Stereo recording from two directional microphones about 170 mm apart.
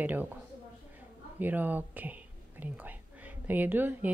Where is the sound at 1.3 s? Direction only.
10° right (ahead or behind).